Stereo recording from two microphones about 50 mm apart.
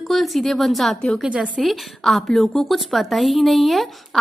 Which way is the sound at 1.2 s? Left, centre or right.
Right.